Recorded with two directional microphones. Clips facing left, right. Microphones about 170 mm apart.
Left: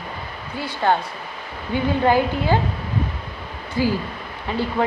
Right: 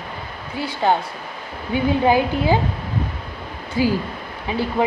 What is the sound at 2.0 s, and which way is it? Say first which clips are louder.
Speech: even; 15° right (ahead or behind).